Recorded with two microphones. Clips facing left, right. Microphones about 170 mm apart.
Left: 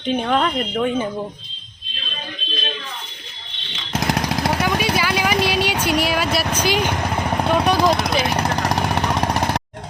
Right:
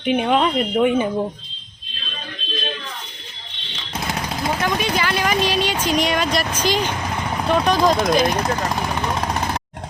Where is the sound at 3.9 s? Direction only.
80° left.